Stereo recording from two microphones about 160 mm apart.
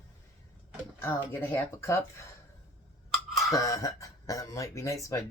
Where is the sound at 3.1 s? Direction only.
Centre (ahead or behind).